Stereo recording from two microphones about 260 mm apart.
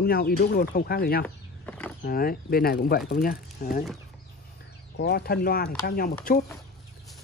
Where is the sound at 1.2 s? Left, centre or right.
Centre.